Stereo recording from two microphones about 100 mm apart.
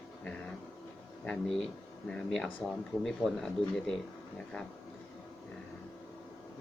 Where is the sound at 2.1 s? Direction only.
10° left (ahead or behind).